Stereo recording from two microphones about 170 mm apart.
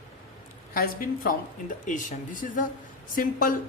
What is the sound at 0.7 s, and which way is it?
A woman's voice, 55° left (ahead or behind).